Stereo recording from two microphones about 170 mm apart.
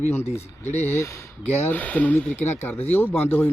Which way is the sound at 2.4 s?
40° left (ahead or behind).